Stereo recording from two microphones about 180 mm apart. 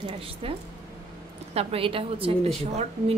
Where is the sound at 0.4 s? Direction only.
30° right (ahead or behind).